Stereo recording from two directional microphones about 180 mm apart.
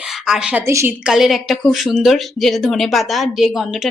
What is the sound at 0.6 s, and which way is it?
Speech, 15° right (ahead or behind).